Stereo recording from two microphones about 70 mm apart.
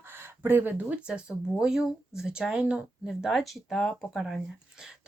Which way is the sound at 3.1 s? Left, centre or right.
Centre.